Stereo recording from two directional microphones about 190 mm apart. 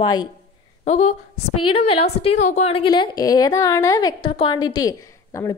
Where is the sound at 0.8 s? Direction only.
35° left (ahead or behind); by 5.5 s 15° left (ahead or behind).